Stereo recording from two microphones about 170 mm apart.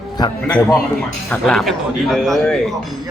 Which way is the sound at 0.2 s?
25° left (ahead or behind).